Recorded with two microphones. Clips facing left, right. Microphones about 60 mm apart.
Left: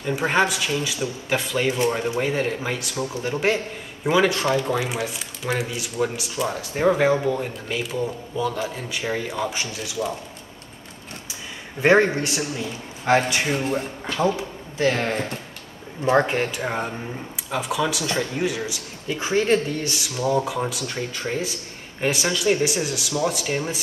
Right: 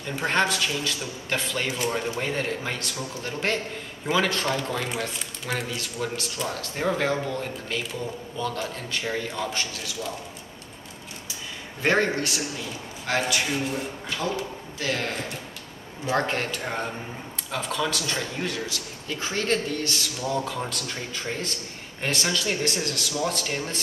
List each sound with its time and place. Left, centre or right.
0.0 s a man's voice: centre
11.8 s a man's voice: centre
16.3 s a man's voice: centre